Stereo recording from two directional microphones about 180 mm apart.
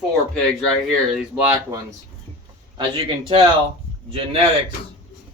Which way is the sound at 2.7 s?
25° right (ahead or behind).